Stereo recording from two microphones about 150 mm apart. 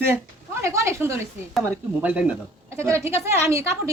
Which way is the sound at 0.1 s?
20° right (ahead or behind).